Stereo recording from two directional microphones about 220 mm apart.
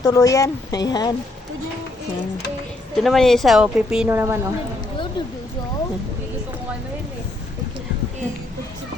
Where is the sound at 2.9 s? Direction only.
Centre (ahead or behind).